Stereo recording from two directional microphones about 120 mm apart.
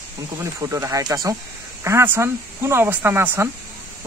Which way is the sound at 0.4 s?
25° right (ahead or behind).